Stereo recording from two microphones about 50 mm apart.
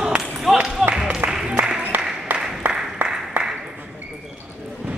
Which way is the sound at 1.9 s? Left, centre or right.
Right.